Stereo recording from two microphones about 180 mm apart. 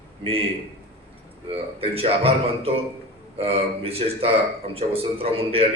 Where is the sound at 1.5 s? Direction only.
30° right (ahead or behind).